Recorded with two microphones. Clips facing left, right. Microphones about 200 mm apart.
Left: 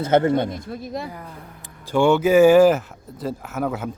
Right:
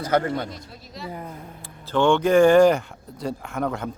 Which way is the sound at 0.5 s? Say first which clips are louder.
Left 11 dB; 50° left (ahead or behind).